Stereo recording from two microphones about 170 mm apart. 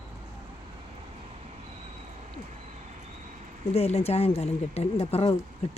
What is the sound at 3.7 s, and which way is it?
Speech, 35° left (ahead or behind).